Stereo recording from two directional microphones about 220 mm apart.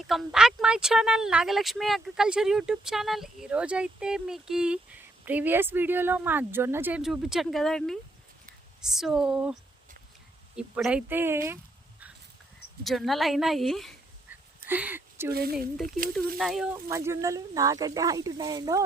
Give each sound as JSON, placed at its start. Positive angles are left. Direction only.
{"t": 0.1, "sound": "speech", "side_deg": 0}
{"t": 15.3, "sound": "speech", "side_deg": -45}
{"t": 16.4, "sound": "speech", "side_deg": 0}
{"t": 16.9, "sound": "speech", "side_deg": -10}